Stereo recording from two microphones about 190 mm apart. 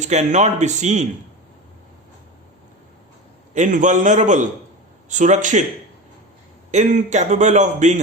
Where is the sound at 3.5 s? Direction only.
40° right (ahead or behind).